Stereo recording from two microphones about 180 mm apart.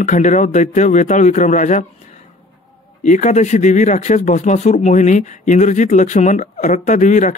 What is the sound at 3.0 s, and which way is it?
Speech, 40° left (ahead or behind).